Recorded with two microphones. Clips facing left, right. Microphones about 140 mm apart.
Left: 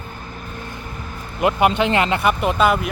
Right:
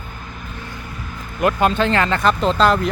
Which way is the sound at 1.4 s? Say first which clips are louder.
Even; 20° left (ahead or behind).